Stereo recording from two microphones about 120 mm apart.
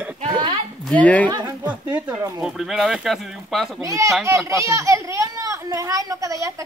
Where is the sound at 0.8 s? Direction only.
10° left (ahead or behind).